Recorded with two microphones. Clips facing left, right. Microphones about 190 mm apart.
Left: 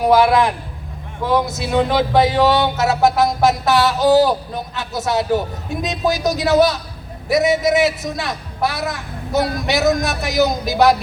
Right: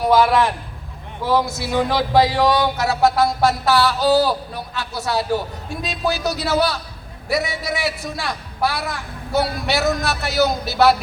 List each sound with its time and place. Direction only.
0.0 s a man's voice: 10° left (ahead or behind)
1.5 s music: 20° left (ahead or behind)
9.6 s a man's voice: 20° left (ahead or behind)